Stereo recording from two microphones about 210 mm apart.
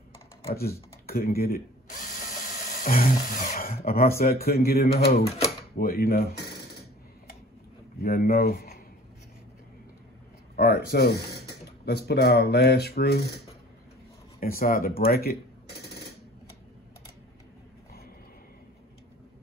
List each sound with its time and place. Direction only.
0.5 s speech: 45° left (ahead or behind)
1.0 s drill: 45° left (ahead or behind)
4.2 s speech: 45° left (ahead or behind)
8.0 s speech: 45° left (ahead or behind)
10.5 s speech: 50° left (ahead or behind)
14.4 s speech: 45° left (ahead or behind)